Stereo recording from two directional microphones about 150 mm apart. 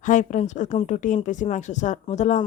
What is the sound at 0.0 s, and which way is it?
Speech, 55° left (ahead or behind).